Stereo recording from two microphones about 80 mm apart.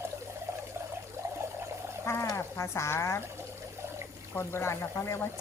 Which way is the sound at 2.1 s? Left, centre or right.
Left.